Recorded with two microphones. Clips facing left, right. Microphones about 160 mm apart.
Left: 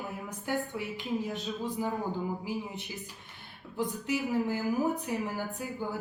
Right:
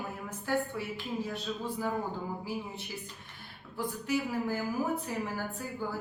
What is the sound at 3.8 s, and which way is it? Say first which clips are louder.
Speech: left 1 dB; 20° left (ahead or behind).